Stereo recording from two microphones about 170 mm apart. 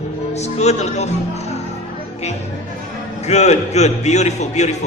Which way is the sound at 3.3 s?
40° left (ahead or behind).